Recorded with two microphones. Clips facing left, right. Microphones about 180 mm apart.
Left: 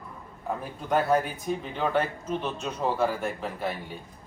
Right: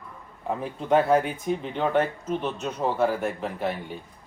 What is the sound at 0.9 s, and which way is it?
Speech, 25° right (ahead or behind).